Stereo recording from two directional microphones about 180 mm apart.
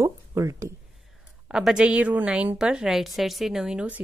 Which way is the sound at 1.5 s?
5° right (ahead or behind).